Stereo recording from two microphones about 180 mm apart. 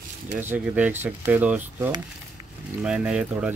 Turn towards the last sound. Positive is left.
turn(degrees=-5)  # may be behind; listen again after turning